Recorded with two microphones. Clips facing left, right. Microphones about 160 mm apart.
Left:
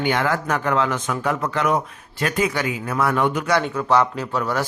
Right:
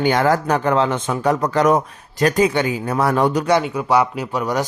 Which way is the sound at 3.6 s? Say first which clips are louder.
Right 1 dB; 10° right (ahead or behind).